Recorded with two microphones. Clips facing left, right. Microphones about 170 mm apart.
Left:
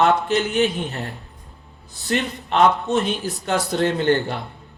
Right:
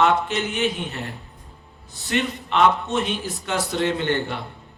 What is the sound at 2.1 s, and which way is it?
Speech, 40° left (ahead or behind).